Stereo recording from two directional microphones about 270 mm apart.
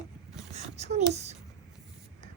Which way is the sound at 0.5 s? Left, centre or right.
Right.